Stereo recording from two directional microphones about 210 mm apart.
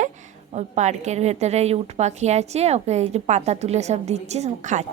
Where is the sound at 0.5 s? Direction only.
35° right (ahead or behind).